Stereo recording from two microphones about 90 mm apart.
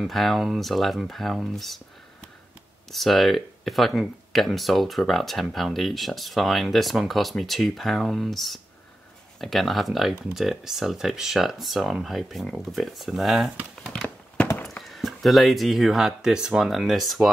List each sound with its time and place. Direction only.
0.0 s speech: centre (ahead or behind)
2.9 s speech: centre (ahead or behind)
14.0 s a sound: 15° left (ahead or behind)
14.8 s speech: centre (ahead or behind)